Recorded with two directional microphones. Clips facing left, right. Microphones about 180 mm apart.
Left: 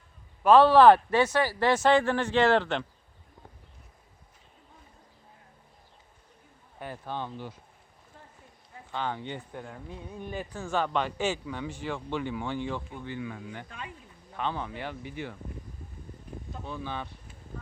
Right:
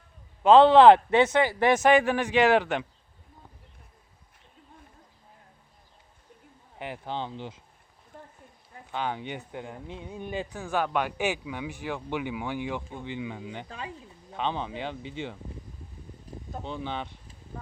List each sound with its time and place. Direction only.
0.4 s speech: 20° right (ahead or behind)
6.7 s speech: 20° right (ahead or behind)
8.9 s speech: 15° right (ahead or behind)
16.6 s speech: 25° right (ahead or behind)